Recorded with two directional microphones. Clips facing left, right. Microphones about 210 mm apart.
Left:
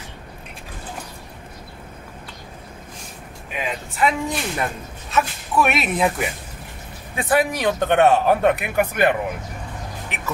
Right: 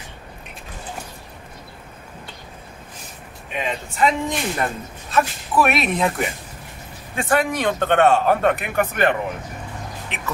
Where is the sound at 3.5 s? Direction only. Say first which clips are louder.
Right 2 dB; 5° left (ahead or behind).